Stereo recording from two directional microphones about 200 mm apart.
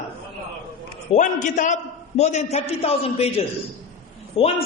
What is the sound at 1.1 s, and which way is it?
A man's voice, 35° left (ahead or behind).